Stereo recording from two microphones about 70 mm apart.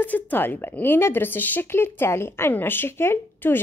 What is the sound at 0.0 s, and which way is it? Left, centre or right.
Speech, left.